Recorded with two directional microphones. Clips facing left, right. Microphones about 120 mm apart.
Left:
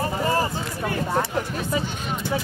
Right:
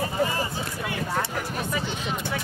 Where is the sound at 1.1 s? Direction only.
25° left (ahead or behind).